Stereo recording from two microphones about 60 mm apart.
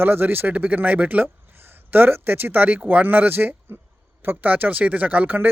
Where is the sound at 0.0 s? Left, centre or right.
Right.